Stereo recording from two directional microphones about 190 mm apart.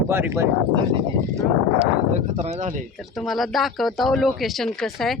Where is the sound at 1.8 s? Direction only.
40° right (ahead or behind).